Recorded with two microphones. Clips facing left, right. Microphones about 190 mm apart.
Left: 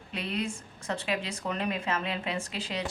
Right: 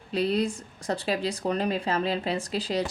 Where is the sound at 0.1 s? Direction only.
35° right (ahead or behind).